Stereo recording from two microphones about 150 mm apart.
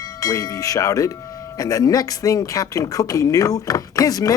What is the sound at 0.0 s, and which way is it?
Speech, 25° left (ahead or behind).